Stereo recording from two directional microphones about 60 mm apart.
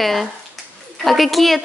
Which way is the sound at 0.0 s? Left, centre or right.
Centre.